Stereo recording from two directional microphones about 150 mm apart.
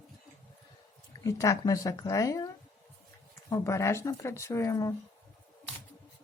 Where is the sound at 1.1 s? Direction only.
20° left (ahead or behind).